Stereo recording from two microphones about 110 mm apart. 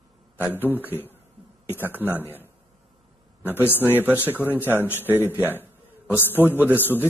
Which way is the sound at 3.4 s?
15° right (ahead or behind).